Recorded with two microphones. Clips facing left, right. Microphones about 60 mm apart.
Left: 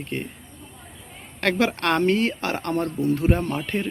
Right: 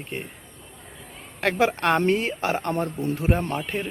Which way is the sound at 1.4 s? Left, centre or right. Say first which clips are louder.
Even; centre.